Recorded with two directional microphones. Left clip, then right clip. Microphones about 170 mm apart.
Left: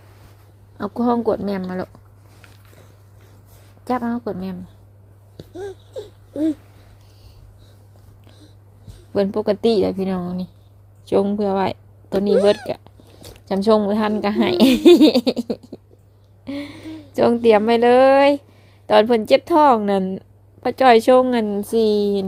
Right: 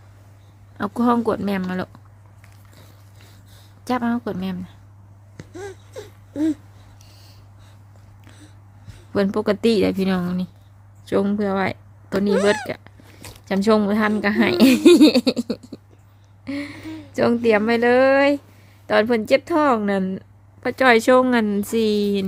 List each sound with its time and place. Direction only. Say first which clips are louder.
0.8 s a woman's voice: even; 10° right (ahead or behind)
3.8 s a woman's voice: even; 10° right (ahead or behind)
5.4 s a sound: left 3 dB; 20° right (ahead or behind)
9.1 s a woman's voice: left 1 dB; 10° right (ahead or behind)
11.0 s speech: left 3 dB; centre (ahead or behind)
12.6 s cat: left 3 dB; 5° right (ahead or behind)
14.2 s a woman's voice: even; centre (ahead or behind)
16.4 s a sound: right 1 dB; centre (ahead or behind)
17.4 s a woman's voice: left 4 dB; 5° left (ahead or behind); by 22.3 s 10° right (ahead or behind)